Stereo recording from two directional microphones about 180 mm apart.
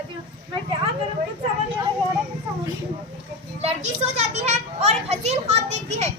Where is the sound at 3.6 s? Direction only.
35° right (ahead or behind).